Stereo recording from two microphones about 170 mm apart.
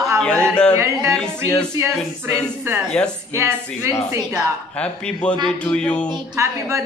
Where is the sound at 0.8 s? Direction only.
15° right (ahead or behind).